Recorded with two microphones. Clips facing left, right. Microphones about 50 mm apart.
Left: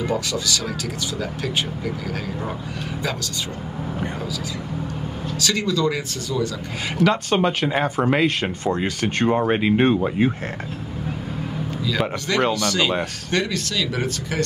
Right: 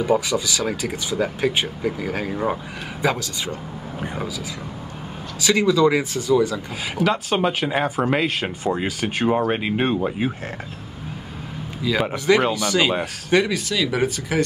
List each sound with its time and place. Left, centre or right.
0.0 s speech: centre
5.4 s speech: centre
7.1 s speech: centre
12.0 s speech: centre